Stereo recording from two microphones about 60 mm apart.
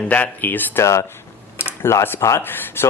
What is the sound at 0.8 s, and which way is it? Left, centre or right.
Speech, left.